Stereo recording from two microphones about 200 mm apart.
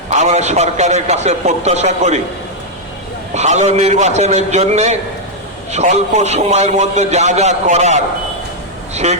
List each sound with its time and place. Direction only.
0.2 s a man's voice: 35° right (ahead or behind)
3.3 s a man's voice: 35° right (ahead or behind)
9.0 s a man's voice: 35° right (ahead or behind)